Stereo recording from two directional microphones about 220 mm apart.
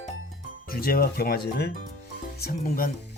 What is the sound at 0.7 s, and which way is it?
Speech, 40° left (ahead or behind).